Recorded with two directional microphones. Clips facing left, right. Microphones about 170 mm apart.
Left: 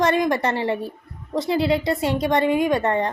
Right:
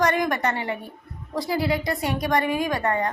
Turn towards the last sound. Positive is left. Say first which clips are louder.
# left 4 dB
turn(degrees=25)  # may be behind; listen again after turning